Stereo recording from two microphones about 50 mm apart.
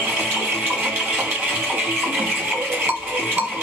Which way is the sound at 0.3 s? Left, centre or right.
Right.